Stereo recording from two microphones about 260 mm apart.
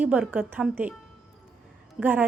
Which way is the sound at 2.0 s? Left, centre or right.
Centre.